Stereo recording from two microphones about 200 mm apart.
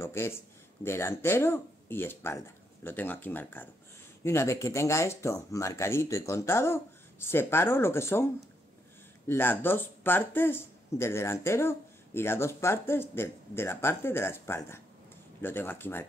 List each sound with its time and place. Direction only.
0.0 s a sound: 15° left (ahead or behind)
0.8 s speech: 10° left (ahead or behind)
9.3 s speech: 10° left (ahead or behind)